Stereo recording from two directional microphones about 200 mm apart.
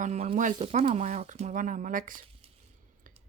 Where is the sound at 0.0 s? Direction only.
30° right (ahead or behind).